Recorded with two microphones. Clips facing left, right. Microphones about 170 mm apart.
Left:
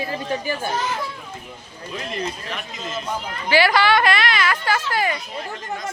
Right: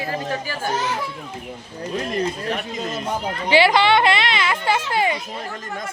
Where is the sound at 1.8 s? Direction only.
45° right (ahead or behind).